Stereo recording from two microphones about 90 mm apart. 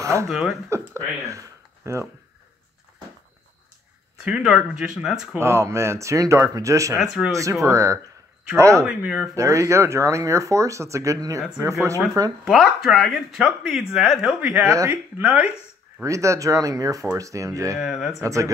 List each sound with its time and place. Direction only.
0.0 s a sound: 35° right (ahead or behind)
0.3 s speech: 5° right (ahead or behind)
0.7 s a sound: 35° right (ahead or behind)
4.2 s speech: 10° right (ahead or behind)
5.4 s speech: 30° right (ahead or behind)
7.2 s speech: 10° left (ahead or behind)
7.6 s speech: 35° right (ahead or behind)
8.8 s speech: 5° right (ahead or behind)
9.3 s speech: 35° right (ahead or behind)
12.4 s speech: centre (ahead or behind); by 15.5 s 20° right (ahead or behind)
16.0 s speech: 35° right (ahead or behind)
17.7 s speech: 5° right (ahead or behind)
18.2 s speech: 35° right (ahead or behind)